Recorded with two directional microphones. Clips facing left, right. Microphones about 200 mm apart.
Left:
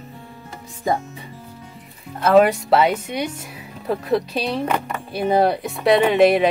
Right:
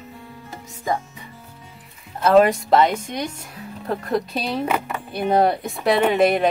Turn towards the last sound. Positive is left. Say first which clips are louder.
# left 3 dB
turn(degrees=0)  # may be behind; listen again after turning